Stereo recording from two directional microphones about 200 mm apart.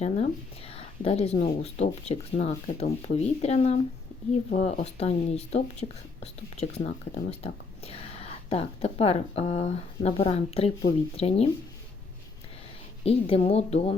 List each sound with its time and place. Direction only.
0.0 s speech: 30° left (ahead or behind)
13.1 s speech: 30° left (ahead or behind)